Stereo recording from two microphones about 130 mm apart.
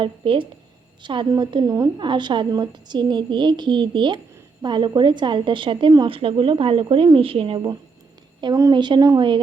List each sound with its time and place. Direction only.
0.0 s a woman's voice: 40° right (ahead or behind)